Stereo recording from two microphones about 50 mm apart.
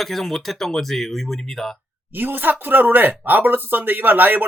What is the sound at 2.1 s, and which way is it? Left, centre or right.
Speech, right.